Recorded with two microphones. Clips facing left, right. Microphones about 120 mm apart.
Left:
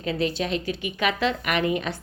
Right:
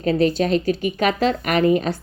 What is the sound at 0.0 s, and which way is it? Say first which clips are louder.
A woman's voice: right 8 dB; 45° right (ahead or behind).